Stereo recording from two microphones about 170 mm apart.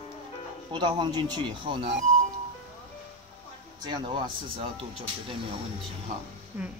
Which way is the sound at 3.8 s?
25° right (ahead or behind).